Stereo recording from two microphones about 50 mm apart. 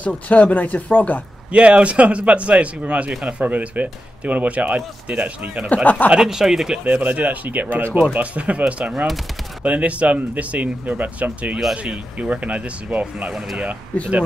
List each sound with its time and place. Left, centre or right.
0.0 s speech: left
1.5 s speech: right
6.1 s speech: centre
6.8 s speech: right